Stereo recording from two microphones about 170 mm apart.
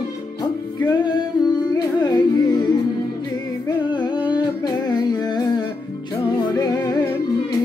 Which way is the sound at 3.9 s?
25° left (ahead or behind).